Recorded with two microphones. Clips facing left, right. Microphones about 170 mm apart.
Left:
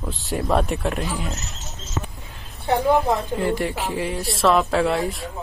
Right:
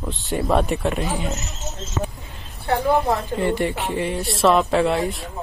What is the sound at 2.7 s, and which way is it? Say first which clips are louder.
Speech: left 1 dB; 15° left (ahead or behind).